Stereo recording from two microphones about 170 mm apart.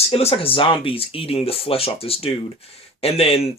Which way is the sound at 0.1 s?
35° left (ahead or behind).